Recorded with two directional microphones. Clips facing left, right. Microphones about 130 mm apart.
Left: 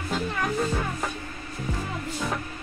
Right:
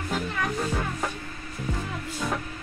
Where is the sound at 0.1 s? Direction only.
Centre (ahead or behind).